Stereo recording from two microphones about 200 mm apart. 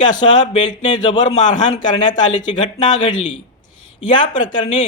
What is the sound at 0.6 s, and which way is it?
A man's voice, 40° left (ahead or behind).